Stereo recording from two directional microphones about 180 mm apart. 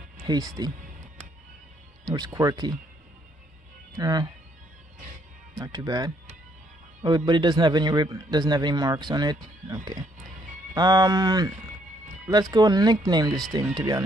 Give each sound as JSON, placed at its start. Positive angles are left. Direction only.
{"t": 0.2, "sound": "speech", "side_deg": -20}
{"t": 2.0, "sound": "a man's voice", "side_deg": -20}
{"t": 3.9, "sound": "speech", "side_deg": -20}
{"t": 5.6, "sound": "a man's voice", "side_deg": -20}